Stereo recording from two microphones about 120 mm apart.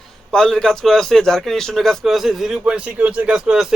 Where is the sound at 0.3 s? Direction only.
5° left (ahead or behind).